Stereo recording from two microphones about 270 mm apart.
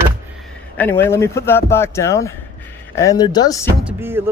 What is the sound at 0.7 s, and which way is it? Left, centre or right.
Speech, centre.